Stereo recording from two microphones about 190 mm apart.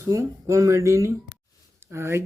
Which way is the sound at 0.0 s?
15° right (ahead or behind).